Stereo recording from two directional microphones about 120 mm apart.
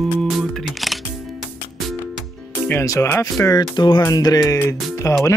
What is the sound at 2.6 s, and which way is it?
Speech, 25° left (ahead or behind).